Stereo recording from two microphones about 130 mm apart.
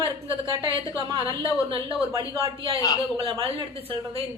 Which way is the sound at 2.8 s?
30° left (ahead or behind).